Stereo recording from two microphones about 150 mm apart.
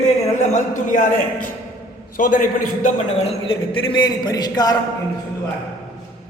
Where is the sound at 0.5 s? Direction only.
55° left (ahead or behind); by 4.7 s 25° left (ahead or behind).